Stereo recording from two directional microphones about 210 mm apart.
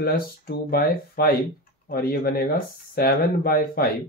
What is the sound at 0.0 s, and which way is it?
Speech, 45° left (ahead or behind).